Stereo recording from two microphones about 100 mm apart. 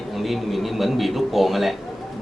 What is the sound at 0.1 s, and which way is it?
Speech, centre (ahead or behind).